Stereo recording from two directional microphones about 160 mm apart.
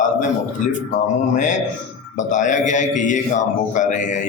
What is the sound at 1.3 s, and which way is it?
A man's voice, 50° left (ahead or behind).